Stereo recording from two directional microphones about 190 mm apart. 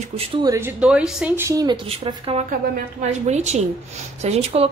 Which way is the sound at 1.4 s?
15° right (ahead or behind).